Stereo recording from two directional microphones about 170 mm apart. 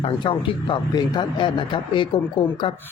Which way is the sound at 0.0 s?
30° left (ahead or behind).